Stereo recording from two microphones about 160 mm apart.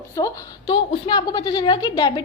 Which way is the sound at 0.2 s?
25° left (ahead or behind).